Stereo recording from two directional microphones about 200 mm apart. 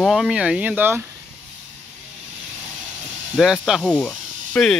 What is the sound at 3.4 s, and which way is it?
Speech, centre (ahead or behind).